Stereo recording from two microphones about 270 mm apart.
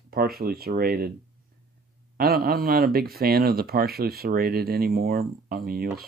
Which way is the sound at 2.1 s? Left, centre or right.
Right.